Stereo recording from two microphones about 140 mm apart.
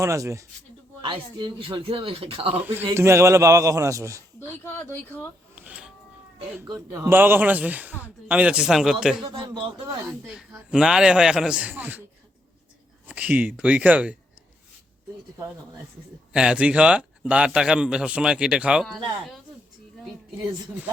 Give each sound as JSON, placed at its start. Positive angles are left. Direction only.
{"t": 0.0, "sound": "a man's voice", "side_deg": -20}
{"t": 1.0, "sound": "speech", "side_deg": -35}
{"t": 2.7, "sound": "a man's voice", "side_deg": -20}
{"t": 4.8, "sound": "speech", "side_deg": 15}
{"t": 5.5, "sound": "music", "side_deg": -10}
{"t": 6.6, "sound": "a man's voice", "side_deg": -20}
{"t": 9.2, "sound": "speech", "side_deg": -35}
{"t": 10.3, "sound": "a man's voice", "side_deg": -5}
{"t": 13.1, "sound": "a man's voice", "side_deg": -10}
{"t": 16.3, "sound": "a man's voice", "side_deg": -5}